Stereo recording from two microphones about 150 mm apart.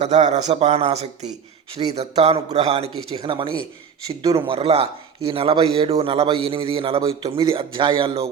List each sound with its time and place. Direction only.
0.0 s a man's voice: 50° right (ahead or behind)